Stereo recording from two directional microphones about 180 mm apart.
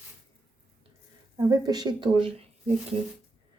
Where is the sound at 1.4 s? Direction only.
20° right (ahead or behind).